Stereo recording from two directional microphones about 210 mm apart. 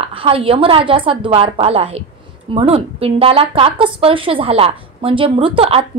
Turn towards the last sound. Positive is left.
turn(degrees=-25)  # may be behind; listen again after turning